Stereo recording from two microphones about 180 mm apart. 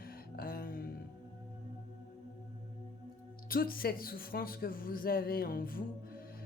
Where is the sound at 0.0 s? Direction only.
55° left (ahead or behind).